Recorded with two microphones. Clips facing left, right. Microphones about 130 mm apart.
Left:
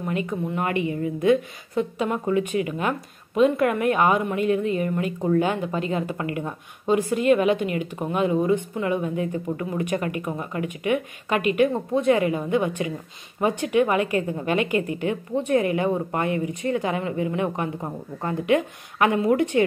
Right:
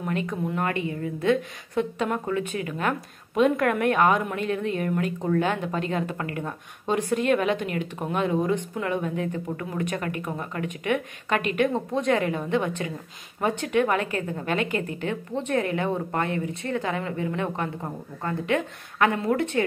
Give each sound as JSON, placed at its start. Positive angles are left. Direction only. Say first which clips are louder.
{"t": 0.0, "sound": "a woman's voice", "louder": "left 1 dB", "side_deg": 5}